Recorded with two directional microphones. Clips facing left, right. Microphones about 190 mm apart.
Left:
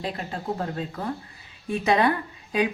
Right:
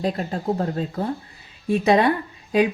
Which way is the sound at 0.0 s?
35° right (ahead or behind).